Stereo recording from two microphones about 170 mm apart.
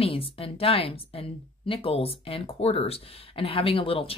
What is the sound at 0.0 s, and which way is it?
Speech, 35° left (ahead or behind).